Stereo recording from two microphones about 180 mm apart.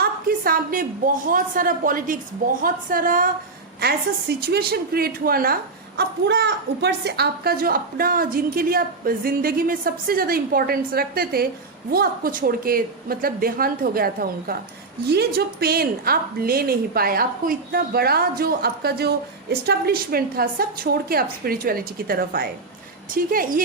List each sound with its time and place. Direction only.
0.0 s a woman's voice: 55° right (ahead or behind)
3.8 s a woman's voice: 60° right (ahead or behind)
6.0 s a woman's voice: 65° right (ahead or behind); by 23.6 s 50° right (ahead or behind)